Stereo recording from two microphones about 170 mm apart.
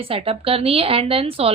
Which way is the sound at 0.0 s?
35° right (ahead or behind).